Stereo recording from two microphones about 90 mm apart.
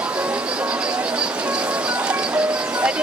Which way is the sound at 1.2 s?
10° right (ahead or behind).